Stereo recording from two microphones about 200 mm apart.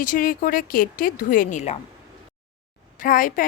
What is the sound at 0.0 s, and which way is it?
A woman's voice, 40° left (ahead or behind).